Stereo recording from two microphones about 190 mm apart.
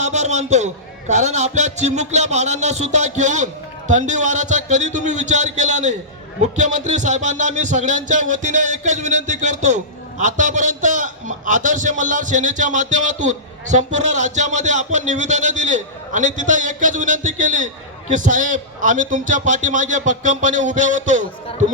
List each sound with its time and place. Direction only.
0.0 s speech: 35° right (ahead or behind)